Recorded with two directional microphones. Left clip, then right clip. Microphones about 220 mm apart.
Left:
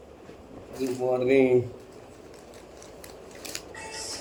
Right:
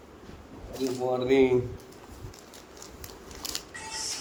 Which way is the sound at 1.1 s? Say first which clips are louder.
Left 1 dB; 10° right (ahead or behind).